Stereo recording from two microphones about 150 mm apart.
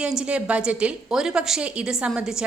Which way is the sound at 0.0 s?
5° right (ahead or behind).